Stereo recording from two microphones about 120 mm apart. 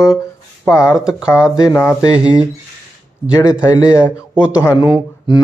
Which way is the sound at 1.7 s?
20° left (ahead or behind).